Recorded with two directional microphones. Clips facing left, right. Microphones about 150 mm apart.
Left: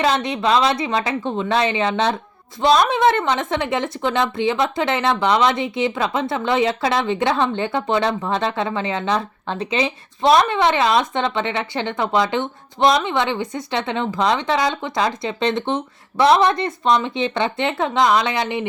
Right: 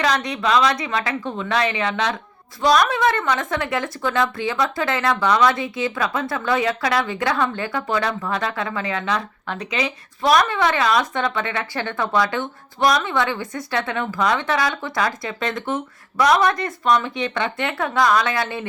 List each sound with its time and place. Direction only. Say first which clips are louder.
0.0 s a woman's voice: left 2 dB; 25° left (ahead or behind)